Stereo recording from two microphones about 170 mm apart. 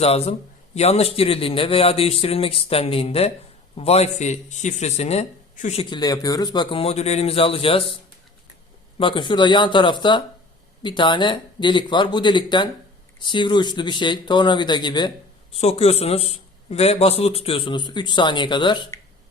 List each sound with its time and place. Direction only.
0.0 s a man's voice: 35° left (ahead or behind)
5.8 s a man's voice: 25° left (ahead or behind)
9.0 s speech: 30° left (ahead or behind)
15.5 s a man's voice: 35° left (ahead or behind)